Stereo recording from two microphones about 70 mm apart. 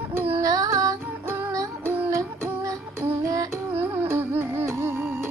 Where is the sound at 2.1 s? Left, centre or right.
Right.